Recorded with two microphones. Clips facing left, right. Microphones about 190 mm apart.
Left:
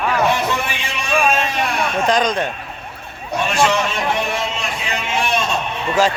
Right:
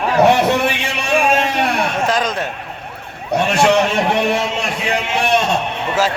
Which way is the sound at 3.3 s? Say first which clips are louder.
Right 4 dB; 65° right (ahead or behind).